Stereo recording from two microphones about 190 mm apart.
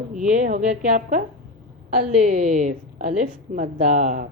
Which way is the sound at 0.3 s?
40° right (ahead or behind).